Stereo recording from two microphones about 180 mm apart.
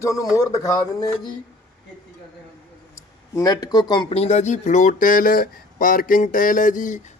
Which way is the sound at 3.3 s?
20° left (ahead or behind).